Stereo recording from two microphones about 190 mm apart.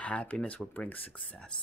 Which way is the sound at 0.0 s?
5° left (ahead or behind).